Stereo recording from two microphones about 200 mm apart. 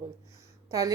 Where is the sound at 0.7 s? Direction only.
15° right (ahead or behind).